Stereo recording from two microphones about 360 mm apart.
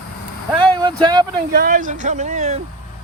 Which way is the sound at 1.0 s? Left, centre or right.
Centre.